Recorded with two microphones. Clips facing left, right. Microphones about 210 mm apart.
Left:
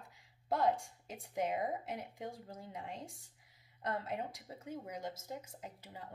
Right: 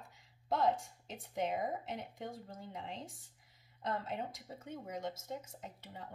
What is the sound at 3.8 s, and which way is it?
Speech, 10° left (ahead or behind).